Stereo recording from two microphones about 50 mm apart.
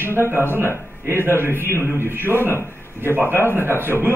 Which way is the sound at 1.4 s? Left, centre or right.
Right.